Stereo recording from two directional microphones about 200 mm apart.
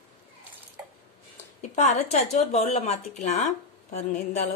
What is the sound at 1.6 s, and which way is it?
A woman's voice, 35° left (ahead or behind).